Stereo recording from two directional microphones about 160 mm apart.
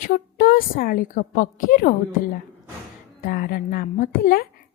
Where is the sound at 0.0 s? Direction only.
60° left (ahead or behind).